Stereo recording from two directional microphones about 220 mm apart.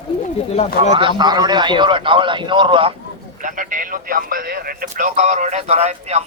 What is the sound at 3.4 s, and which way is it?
Speech, 35° right (ahead or behind).